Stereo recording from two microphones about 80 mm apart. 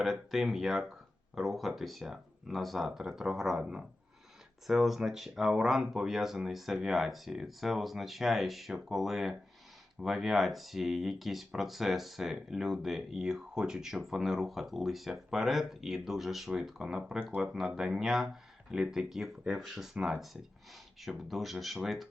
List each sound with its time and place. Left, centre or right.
0.0 s speech: centre